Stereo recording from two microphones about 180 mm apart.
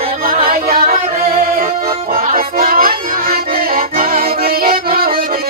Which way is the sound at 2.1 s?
50° right (ahead or behind).